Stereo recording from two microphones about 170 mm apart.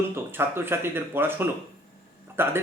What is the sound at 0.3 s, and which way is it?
A man's voice, 15° right (ahead or behind).